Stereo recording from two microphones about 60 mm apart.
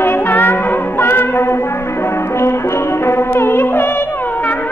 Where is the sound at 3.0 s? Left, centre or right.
Left.